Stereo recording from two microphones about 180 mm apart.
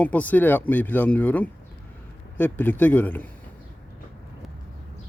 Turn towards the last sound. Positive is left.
turn(degrees=10)  # may be behind; listen again after turning